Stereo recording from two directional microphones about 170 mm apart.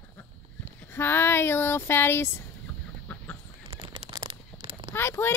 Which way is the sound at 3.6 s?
25° right (ahead or behind).